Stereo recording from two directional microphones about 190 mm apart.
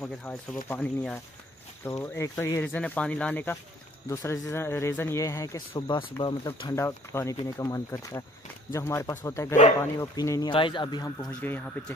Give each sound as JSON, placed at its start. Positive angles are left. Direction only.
{"t": 0.0, "sound": "speech", "side_deg": 5}